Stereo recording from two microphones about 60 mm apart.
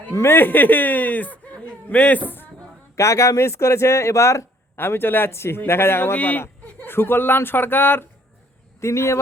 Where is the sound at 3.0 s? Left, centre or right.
Left.